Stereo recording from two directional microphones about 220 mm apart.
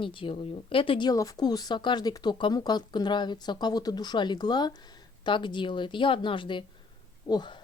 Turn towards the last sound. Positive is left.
turn(degrees=20)  # may be behind; listen again after turning